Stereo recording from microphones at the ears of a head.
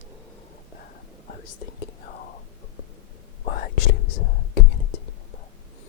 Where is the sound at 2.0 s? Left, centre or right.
Left.